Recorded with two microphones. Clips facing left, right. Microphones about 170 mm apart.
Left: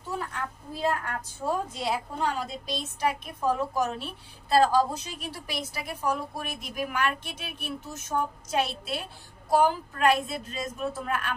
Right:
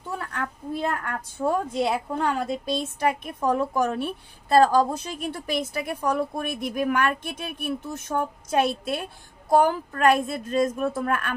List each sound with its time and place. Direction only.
0.3 s a woman's voice: 60° right (ahead or behind)